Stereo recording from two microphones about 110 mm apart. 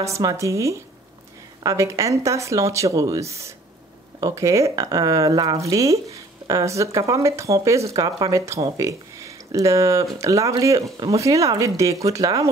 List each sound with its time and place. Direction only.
0.0 s speech: 30° right (ahead or behind)